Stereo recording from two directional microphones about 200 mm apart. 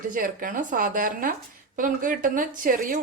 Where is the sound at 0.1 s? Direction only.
45° right (ahead or behind).